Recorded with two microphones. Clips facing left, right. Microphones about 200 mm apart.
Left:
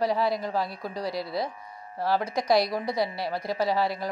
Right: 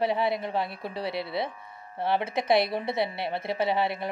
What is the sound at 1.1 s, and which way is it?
Speech, 65° right (ahead or behind).